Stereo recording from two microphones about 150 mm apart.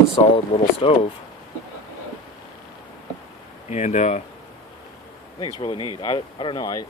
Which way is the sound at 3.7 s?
50° left (ahead or behind).